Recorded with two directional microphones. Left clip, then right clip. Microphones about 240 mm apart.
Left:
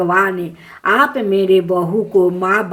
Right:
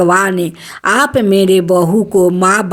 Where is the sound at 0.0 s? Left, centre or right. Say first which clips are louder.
Right 4 dB; right.